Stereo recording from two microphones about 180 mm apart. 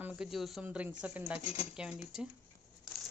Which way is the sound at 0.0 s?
5° right (ahead or behind).